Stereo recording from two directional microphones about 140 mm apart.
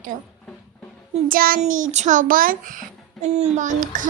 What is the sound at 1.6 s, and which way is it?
A child's voice, 60° right (ahead or behind).